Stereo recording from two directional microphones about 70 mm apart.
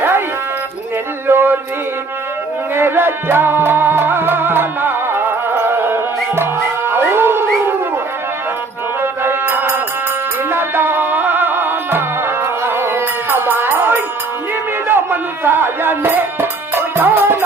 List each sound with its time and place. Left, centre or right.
1.3 s a sound: right
2.7 s music: right
9.0 s music: right